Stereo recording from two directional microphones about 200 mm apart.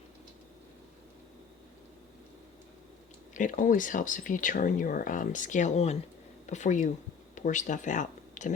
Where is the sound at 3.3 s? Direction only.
40° left (ahead or behind).